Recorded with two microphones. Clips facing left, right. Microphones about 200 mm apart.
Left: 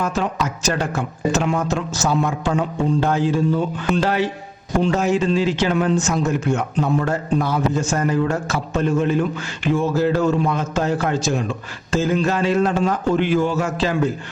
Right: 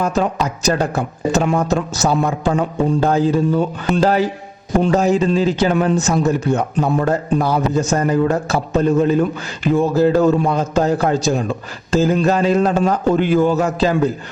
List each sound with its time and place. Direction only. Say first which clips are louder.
0.0 s a man's voice: right 4 dB; 35° right (ahead or behind)